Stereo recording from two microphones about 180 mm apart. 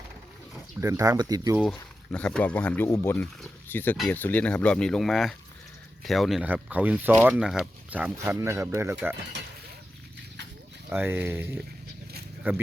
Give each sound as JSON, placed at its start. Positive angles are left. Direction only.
{"t": 0.8, "sound": "speech", "side_deg": -15}
{"t": 1.5, "sound": "speech", "side_deg": 0}
{"t": 10.8, "sound": "speech", "side_deg": -10}